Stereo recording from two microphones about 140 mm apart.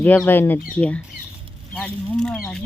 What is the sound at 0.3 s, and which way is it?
Speech, 15° left (ahead or behind).